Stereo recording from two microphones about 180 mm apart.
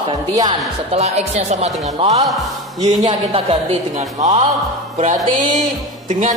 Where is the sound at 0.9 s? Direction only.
35° right (ahead or behind).